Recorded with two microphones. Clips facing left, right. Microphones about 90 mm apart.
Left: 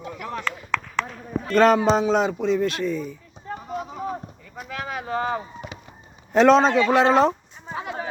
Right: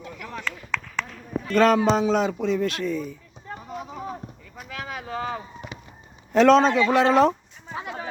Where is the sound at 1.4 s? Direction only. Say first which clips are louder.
Left 2 dB; 40° left (ahead or behind).